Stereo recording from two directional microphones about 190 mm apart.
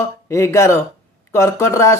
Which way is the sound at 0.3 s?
15° left (ahead or behind).